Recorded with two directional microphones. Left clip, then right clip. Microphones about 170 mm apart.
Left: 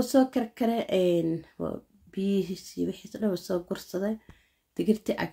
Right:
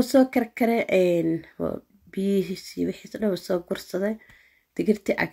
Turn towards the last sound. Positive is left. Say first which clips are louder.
# right 4 dB
turn(degrees=-20)  # may be behind; listen again after turning